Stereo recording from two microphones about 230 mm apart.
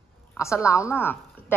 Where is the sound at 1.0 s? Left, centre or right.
Centre.